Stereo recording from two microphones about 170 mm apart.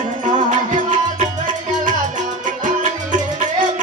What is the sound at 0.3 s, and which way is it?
Music, 45° right (ahead or behind).